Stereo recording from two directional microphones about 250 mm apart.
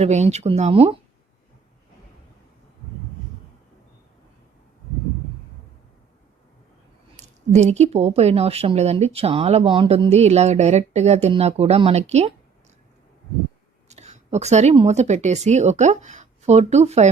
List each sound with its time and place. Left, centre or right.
0.0 s a woman's voice: right
7.2 s a woman's voice: right
13.8 s speech: right